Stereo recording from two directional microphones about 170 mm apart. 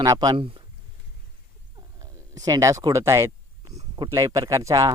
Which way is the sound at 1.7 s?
20° right (ahead or behind).